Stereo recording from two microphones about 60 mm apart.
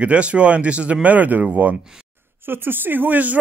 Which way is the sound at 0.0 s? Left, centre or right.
Right.